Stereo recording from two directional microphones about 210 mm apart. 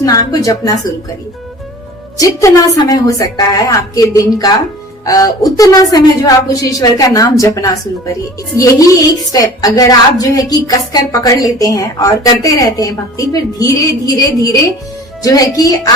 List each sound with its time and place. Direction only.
0.0 s a woman's voice: 15° left (ahead or behind)
2.1 s a woman's voice: 15° left (ahead or behind)